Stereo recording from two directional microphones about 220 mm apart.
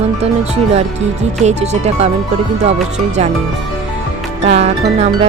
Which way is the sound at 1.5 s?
30° right (ahead or behind).